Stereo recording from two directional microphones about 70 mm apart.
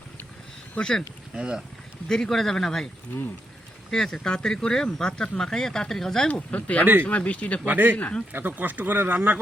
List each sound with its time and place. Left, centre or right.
0.8 s speech: centre
1.4 s speech: centre
2.0 s speech: centre
3.9 s speech: centre
6.8 s speech: right
7.1 s speech: centre
7.6 s speech: right
7.9 s speech: left
8.3 s speech: right